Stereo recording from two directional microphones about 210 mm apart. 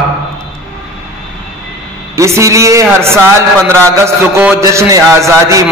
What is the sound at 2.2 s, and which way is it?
A man's voice, 15° right (ahead or behind).